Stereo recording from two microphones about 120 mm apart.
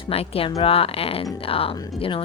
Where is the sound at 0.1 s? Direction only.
55° left (ahead or behind).